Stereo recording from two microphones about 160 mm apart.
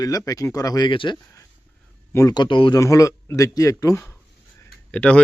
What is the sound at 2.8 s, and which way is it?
Speech, 20° left (ahead or behind).